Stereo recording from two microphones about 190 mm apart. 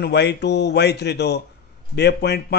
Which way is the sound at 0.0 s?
60° left (ahead or behind).